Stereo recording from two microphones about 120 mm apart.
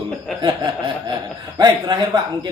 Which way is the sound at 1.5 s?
35° right (ahead or behind).